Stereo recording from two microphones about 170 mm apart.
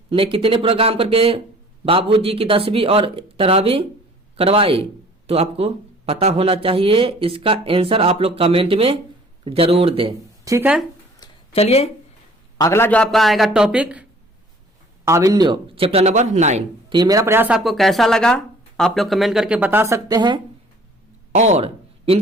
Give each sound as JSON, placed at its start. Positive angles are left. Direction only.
{"t": 0.1, "sound": "speech", "side_deg": -30}
{"t": 10.4, "sound": "speech", "side_deg": -15}
{"t": 11.5, "sound": "speech", "side_deg": 35}
{"t": 12.5, "sound": "speech", "side_deg": 15}
{"t": 15.0, "sound": "speech", "side_deg": -20}
{"t": 16.9, "sound": "speech", "side_deg": -20}
{"t": 21.3, "sound": "speech", "side_deg": -40}